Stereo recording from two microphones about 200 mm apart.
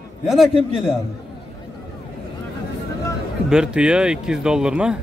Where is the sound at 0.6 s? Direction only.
25° left (ahead or behind).